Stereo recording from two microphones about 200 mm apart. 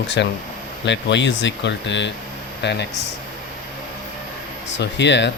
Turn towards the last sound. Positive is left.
turn(degrees=60)  # may be behind; listen again after turning